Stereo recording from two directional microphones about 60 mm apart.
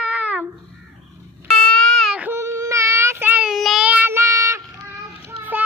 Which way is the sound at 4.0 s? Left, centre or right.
Right.